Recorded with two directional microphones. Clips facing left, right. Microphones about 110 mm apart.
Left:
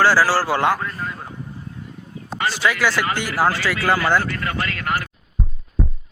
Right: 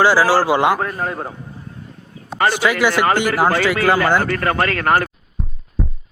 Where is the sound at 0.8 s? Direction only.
55° right (ahead or behind).